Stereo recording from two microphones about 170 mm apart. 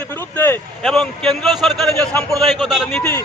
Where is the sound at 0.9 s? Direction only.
Centre (ahead or behind).